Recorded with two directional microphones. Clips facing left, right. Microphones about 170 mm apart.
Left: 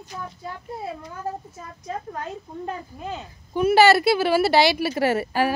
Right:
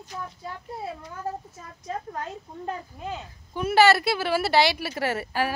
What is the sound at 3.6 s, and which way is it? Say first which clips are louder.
A woman's voice: left 3 dB; 10° left (ahead or behind).